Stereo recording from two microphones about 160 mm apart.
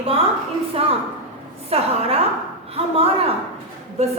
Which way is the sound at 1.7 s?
40° right (ahead or behind).